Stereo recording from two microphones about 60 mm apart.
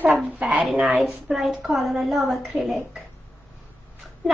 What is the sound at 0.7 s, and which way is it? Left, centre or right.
A woman's voice, centre.